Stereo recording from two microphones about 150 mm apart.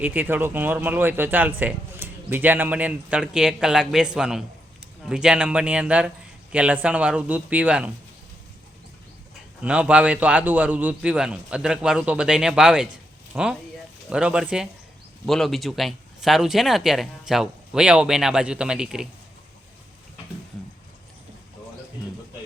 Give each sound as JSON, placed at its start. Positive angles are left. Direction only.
{"t": 0.0, "sound": "speech", "side_deg": -10}
{"t": 9.6, "sound": "speech", "side_deg": -10}